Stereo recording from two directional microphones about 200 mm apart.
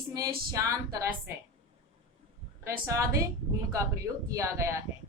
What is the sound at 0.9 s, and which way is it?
Speech, 20° right (ahead or behind).